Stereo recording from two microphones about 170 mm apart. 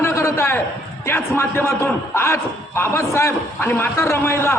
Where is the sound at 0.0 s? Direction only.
15° left (ahead or behind).